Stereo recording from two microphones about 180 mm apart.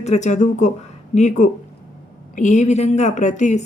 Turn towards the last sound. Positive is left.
turn(degrees=40)  # may be behind; listen again after turning